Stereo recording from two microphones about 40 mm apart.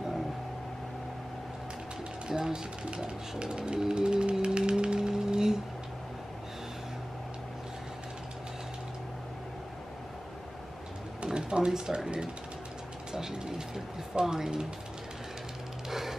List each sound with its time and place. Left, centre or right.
2.2 s speech: centre
4.6 s music: right
11.2 s speech: right
13.1 s speech: centre
15.9 s music: centre